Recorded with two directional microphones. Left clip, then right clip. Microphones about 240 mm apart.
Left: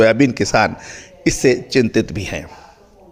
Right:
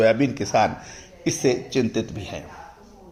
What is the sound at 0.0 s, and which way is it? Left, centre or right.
A man's voice, left.